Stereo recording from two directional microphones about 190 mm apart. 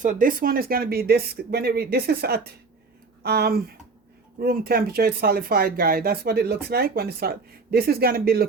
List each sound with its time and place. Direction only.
0.0 s speech: 45° right (ahead or behind)